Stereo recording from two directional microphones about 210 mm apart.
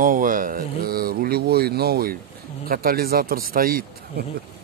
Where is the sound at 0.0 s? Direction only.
40° right (ahead or behind).